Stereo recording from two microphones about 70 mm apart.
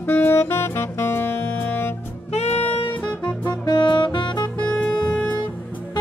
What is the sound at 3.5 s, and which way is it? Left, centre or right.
Music, left.